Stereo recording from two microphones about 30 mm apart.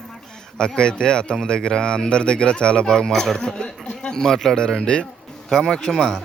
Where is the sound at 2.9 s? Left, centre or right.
Centre.